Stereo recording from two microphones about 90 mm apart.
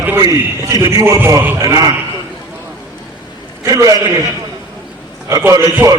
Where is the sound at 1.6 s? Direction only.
45° right (ahead or behind).